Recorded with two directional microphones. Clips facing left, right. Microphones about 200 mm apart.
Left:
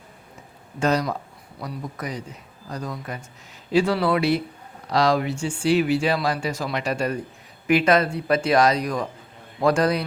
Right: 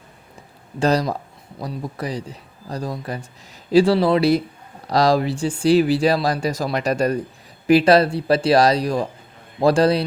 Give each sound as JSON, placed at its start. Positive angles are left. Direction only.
{"t": 0.8, "sound": "speech", "side_deg": -35}